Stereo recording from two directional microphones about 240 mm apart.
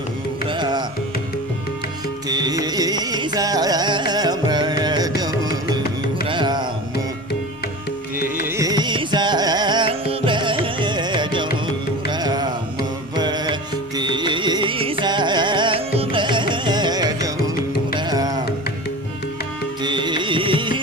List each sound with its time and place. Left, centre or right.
0.4 s music: centre
2.2 s carnatic music: centre
6.2 s music: centre
8.4 s music: centre
10.8 s carnatic music: centre
13.1 s music: centre
19.8 s carnatic music: centre